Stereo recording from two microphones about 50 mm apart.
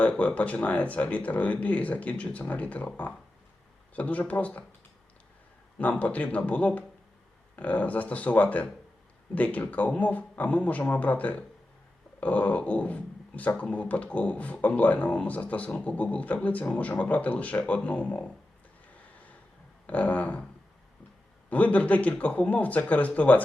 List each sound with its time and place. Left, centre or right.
0.0 s speech: left
5.8 s speech: left
19.9 s speech: left
21.5 s speech: left